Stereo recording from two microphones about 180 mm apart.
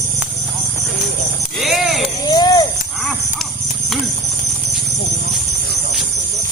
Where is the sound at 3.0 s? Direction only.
Centre (ahead or behind).